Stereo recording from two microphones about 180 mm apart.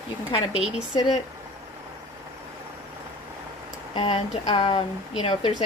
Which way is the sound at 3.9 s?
30° left (ahead or behind).